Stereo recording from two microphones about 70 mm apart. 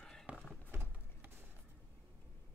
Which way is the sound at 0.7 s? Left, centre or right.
Right.